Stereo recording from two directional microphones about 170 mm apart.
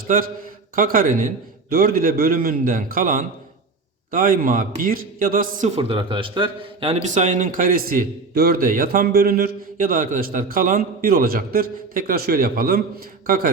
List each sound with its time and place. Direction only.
0.8 s a man's voice: 55° right (ahead or behind)
6.0 s speech: 30° right (ahead or behind)
7.1 s a man's voice: 45° right (ahead or behind)